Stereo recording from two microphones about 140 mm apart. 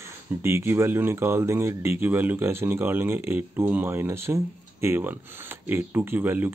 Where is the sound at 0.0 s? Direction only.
20° right (ahead or behind).